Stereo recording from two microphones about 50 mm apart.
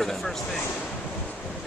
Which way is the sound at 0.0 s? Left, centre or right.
Centre.